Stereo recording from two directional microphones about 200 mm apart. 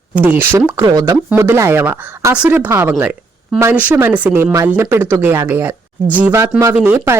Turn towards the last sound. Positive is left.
turn(degrees=-10)  # may be behind; listen again after turning